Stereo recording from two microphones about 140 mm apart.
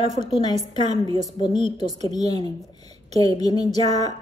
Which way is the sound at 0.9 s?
30° left (ahead or behind).